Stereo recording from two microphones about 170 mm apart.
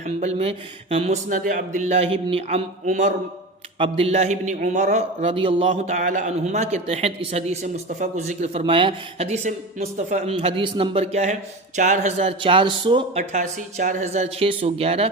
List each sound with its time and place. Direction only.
0.2 s a man's voice: 40° right (ahead or behind)
1.3 s a man's voice: 50° right (ahead or behind); by 2.6 s 35° right (ahead or behind)
2.8 s speech: 45° right (ahead or behind)
3.8 s a man's voice: 30° right (ahead or behind)
10.3 s a man's voice: 30° right (ahead or behind)
13.3 s a man's voice: 45° right (ahead or behind)